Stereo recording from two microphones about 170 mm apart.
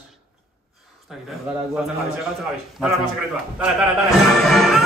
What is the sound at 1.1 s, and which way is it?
Speech, centre (ahead or behind).